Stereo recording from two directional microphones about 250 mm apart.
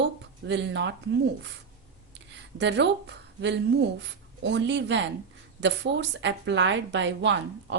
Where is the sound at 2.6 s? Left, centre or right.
Right.